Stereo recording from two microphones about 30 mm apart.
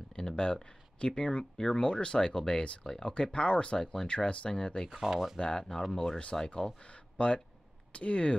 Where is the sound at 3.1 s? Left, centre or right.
Left.